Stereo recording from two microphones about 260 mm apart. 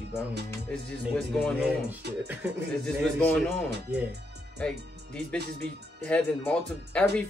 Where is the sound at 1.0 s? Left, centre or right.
Centre.